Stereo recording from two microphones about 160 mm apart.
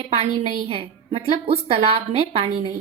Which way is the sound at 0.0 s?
40° right (ahead or behind).